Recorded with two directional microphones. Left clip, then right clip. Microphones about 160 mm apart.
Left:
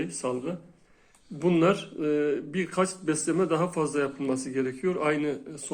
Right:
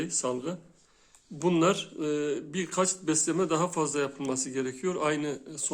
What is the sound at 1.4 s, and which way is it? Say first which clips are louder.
A man's voice: left 2 dB; 30° right (ahead or behind).